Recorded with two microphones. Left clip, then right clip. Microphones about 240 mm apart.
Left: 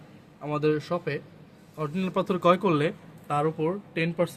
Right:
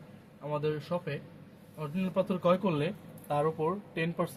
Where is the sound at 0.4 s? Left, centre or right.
Left.